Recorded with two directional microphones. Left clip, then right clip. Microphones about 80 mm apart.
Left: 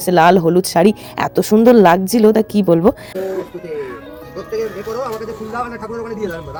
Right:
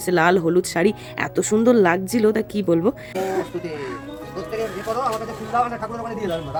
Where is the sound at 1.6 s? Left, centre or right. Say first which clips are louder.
Left 8 dB; left.